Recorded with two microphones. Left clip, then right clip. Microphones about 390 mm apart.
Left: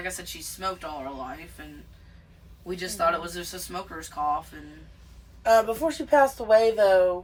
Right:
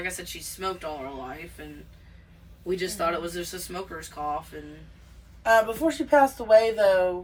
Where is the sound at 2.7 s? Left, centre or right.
Centre.